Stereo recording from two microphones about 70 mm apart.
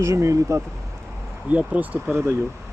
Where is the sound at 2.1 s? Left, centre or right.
Right.